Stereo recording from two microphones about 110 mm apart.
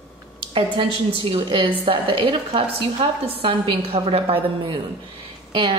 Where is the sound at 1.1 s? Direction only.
55° right (ahead or behind).